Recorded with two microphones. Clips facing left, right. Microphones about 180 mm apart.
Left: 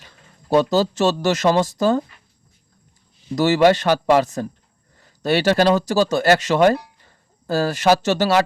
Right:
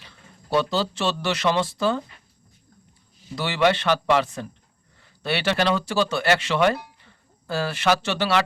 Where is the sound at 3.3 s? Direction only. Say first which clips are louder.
Left 7 dB; 45° left (ahead or behind).